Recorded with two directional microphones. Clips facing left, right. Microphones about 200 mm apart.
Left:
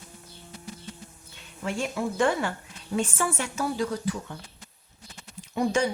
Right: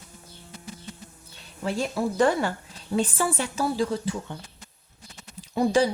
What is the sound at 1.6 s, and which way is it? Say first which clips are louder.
Speech: right 3 dB; 35° right (ahead or behind).